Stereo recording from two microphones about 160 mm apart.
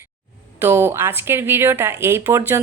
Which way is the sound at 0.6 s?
15° right (ahead or behind).